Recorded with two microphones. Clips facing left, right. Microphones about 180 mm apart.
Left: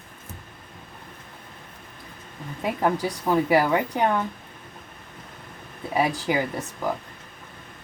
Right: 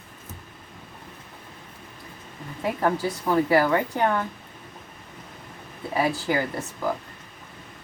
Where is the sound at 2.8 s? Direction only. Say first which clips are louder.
Left 1 dB; 15° left (ahead or behind).